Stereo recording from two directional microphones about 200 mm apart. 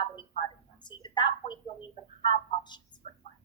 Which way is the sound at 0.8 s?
20° left (ahead or behind).